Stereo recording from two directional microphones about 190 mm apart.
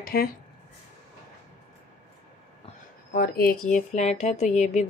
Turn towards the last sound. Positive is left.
turn(degrees=35)  # may be behind; listen again after turning